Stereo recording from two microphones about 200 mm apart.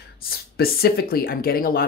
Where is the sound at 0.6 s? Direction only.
50° left (ahead or behind).